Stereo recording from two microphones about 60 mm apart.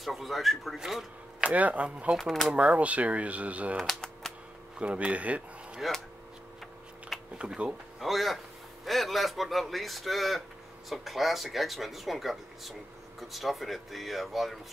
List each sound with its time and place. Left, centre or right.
0.0 s speech: centre
1.4 s speech: right
2.1 s speech: centre
2.5 s speech: right
3.7 s speech: centre
4.7 s speech: right
5.8 s speech: centre
7.3 s speech: centre
8.0 s speech: centre